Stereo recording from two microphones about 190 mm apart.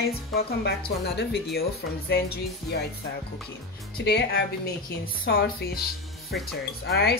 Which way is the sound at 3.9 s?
60° left (ahead or behind).